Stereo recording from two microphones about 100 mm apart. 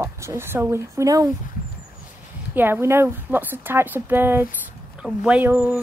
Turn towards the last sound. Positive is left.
turn(degrees=-15)  # may be behind; listen again after turning